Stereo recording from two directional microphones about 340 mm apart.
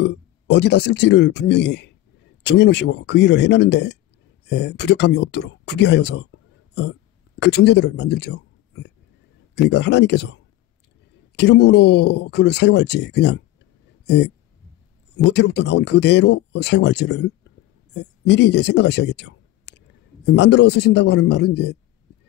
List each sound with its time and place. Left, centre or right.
0.0 s speech: left